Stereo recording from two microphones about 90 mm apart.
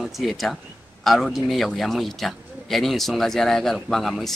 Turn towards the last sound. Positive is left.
turn(degrees=0)  # may be behind; listen again after turning